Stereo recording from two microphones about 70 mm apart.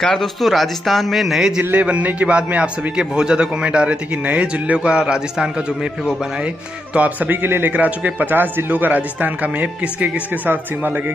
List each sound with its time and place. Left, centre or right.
0.0 s speech: centre
1.6 s a man's voice: right
6.9 s speech: right